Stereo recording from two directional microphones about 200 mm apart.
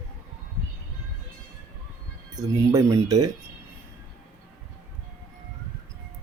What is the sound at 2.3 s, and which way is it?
Speech, 15° right (ahead or behind).